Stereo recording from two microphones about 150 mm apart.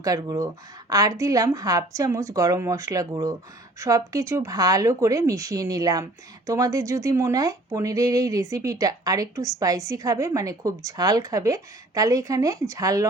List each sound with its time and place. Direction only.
0.0 s speech: 25° right (ahead or behind)